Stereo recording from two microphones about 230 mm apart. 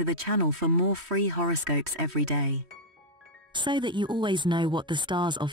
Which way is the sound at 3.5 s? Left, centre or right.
Centre.